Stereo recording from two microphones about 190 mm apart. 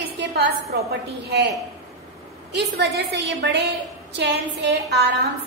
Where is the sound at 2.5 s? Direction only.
65° right (ahead or behind).